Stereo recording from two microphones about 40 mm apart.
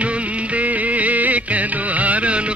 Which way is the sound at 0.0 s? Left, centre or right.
Right.